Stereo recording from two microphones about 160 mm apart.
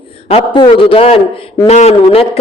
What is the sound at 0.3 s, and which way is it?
A woman's voice, 35° left (ahead or behind).